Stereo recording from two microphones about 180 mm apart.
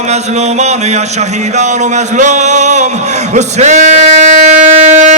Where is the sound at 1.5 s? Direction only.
40° right (ahead or behind).